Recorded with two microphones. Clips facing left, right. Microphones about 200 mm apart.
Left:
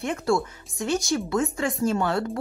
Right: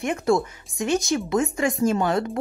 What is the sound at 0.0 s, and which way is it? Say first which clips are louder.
A woman's voice: right 3 dB; 15° right (ahead or behind).